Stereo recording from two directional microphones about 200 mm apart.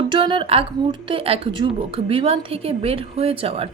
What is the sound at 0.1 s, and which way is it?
A woman's voice, 25° right (ahead or behind).